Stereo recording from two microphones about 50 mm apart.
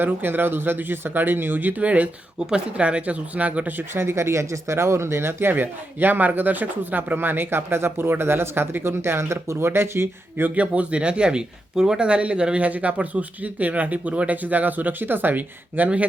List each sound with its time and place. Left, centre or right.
0.0 s speech: right
3.9 s speech: right
10.5 s speech: right